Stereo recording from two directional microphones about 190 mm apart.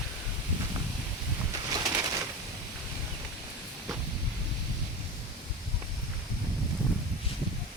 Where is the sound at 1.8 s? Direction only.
20° right (ahead or behind).